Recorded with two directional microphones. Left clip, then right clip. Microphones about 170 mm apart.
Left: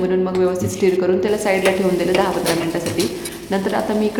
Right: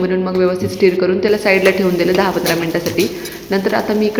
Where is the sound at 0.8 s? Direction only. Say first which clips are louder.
Right 3 dB; 20° right (ahead or behind).